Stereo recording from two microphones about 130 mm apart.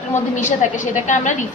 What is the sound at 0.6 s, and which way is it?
Speech, 70° left (ahead or behind).